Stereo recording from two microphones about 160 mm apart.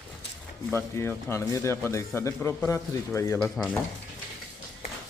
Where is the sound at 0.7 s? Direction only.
15° left (ahead or behind).